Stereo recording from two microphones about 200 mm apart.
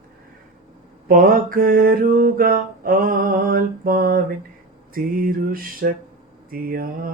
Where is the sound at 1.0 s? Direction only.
45° right (ahead or behind).